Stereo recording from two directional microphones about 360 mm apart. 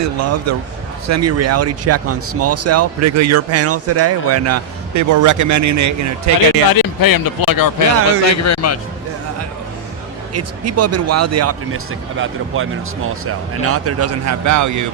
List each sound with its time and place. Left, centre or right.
0.0 s speech: right
6.7 s speech: left
8.4 s a man's voice: left
10.3 s speech: right